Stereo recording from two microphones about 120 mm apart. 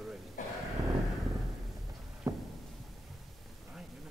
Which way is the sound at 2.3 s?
30° right (ahead or behind).